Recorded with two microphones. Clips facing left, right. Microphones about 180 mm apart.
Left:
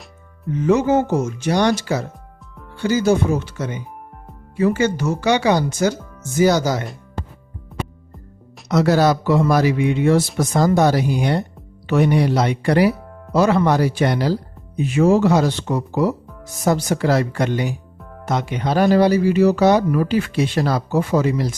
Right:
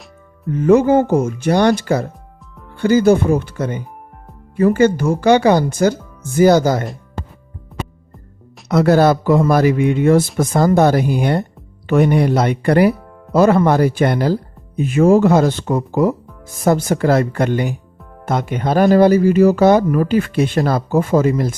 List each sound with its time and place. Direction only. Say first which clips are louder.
0.5 s speech: right 5 dB; 55° right (ahead or behind)
7.7 s music: right 1 dB; centre (ahead or behind)
8.7 s speech: right 3 dB; 55° right (ahead or behind)